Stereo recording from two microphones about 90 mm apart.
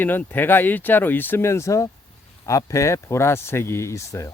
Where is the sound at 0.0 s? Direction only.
20° left (ahead or behind).